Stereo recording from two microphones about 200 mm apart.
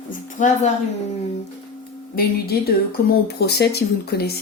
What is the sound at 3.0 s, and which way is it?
A woman's voice, 55° left (ahead or behind).